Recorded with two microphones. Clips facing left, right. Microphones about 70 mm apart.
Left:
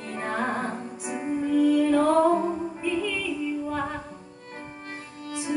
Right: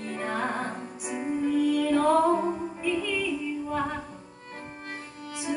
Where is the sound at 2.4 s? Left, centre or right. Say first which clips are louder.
Left 1 dB; centre.